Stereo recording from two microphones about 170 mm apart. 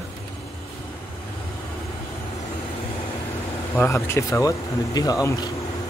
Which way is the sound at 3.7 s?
15° left (ahead or behind).